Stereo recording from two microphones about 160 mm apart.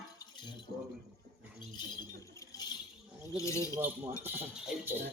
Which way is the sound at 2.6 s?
25° left (ahead or behind).